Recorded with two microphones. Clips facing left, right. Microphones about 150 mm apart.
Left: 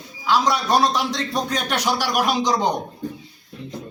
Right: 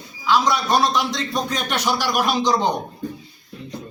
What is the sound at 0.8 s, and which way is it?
Speech, 35° left (ahead or behind).